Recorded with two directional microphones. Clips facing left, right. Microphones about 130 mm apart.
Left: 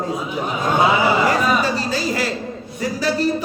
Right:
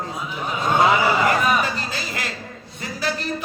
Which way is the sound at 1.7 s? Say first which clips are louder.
Left 8 dB; 35° left (ahead or behind).